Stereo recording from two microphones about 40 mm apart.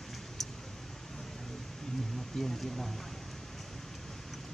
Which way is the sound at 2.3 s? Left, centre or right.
Centre.